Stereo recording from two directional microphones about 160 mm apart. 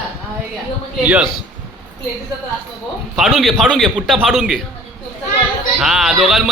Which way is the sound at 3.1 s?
Centre (ahead or behind).